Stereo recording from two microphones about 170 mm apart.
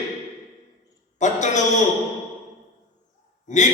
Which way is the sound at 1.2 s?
45° left (ahead or behind).